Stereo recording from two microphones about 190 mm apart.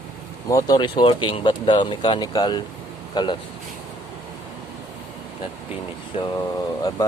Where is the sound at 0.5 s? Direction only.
20° left (ahead or behind).